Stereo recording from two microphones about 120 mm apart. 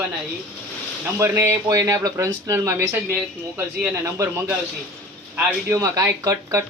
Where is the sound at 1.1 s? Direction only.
20° right (ahead or behind).